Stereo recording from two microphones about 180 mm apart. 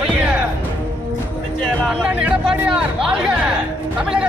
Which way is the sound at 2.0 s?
5° right (ahead or behind).